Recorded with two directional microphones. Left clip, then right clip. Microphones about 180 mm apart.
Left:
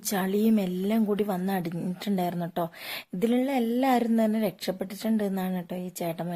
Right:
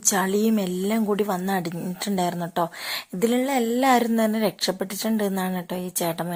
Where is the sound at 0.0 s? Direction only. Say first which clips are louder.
Right 5 dB; centre (ahead or behind).